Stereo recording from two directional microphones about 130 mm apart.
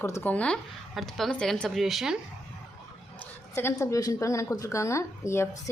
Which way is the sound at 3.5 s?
20° left (ahead or behind).